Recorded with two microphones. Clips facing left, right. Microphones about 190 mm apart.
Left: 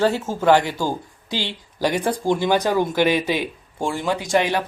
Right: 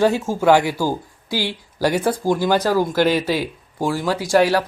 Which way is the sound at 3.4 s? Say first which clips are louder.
Right 2 dB; 5° right (ahead or behind).